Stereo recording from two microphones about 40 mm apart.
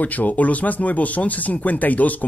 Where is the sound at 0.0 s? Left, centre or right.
Left.